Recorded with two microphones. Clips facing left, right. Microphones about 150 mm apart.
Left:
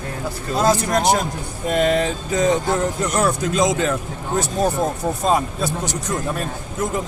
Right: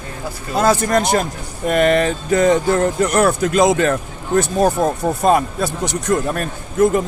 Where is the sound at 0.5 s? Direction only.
60° right (ahead or behind).